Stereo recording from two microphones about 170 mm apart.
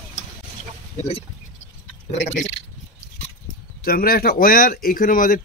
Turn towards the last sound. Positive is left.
turn(degrees=55)  # may be behind; listen again after turning